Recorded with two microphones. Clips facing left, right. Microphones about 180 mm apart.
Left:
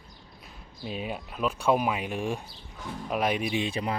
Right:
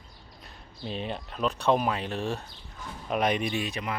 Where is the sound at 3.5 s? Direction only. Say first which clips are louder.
Left 3 dB; 30° left (ahead or behind).